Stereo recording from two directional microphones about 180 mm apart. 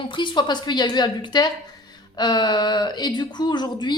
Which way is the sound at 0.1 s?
25° left (ahead or behind).